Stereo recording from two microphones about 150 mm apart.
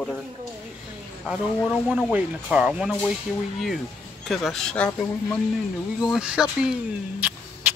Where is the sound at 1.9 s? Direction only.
10° right (ahead or behind).